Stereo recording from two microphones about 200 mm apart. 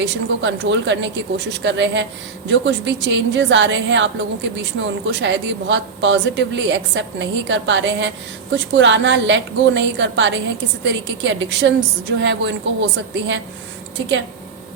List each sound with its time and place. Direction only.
0.0 s a woman's voice: 60° right (ahead or behind)